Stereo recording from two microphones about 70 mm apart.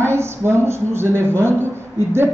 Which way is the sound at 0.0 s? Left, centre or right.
Right.